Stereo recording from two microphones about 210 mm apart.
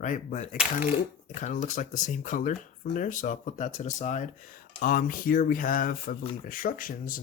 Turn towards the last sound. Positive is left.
turn(degrees=40)  # may be behind; listen again after turning